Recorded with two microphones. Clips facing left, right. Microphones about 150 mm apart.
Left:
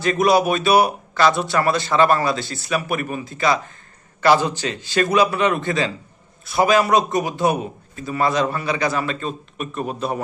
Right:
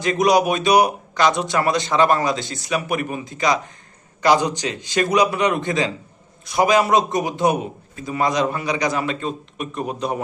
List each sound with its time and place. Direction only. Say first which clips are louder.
0.0 s a man's voice: even; 15° right (ahead or behind)